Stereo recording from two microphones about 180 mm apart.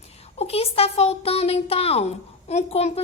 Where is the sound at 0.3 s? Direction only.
35° left (ahead or behind).